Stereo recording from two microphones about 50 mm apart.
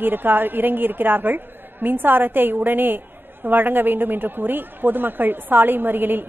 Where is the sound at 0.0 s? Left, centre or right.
Right.